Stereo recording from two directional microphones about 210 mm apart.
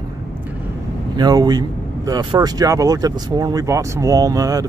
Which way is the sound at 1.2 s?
20° right (ahead or behind).